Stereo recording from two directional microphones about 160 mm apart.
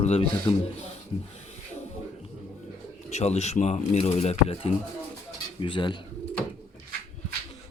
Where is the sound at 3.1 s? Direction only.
45° left (ahead or behind).